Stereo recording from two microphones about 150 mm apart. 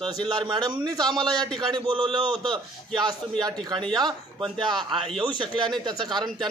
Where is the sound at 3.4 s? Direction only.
30° right (ahead or behind).